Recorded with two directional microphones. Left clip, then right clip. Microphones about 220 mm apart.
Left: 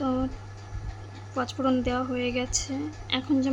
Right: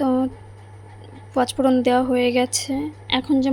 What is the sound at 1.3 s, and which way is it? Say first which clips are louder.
Speech: right 8 dB; 25° right (ahead or behind).